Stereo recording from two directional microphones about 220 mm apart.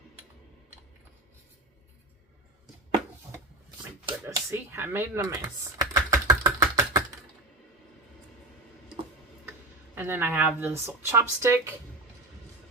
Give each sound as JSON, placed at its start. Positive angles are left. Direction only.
{"t": 4.0, "sound": "speech", "side_deg": -15}
{"t": 5.8, "sound": "a sound", "side_deg": -15}
{"t": 9.5, "sound": "speech", "side_deg": -10}